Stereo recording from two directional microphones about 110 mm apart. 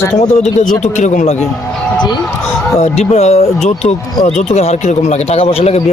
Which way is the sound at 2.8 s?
80° left.